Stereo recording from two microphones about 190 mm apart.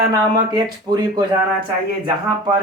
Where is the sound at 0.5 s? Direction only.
20° right (ahead or behind).